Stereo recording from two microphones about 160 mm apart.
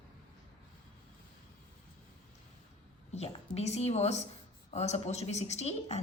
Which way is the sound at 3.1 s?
40° left (ahead or behind).